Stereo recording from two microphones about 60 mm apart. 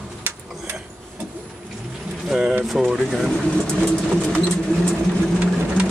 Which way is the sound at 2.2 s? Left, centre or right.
Centre.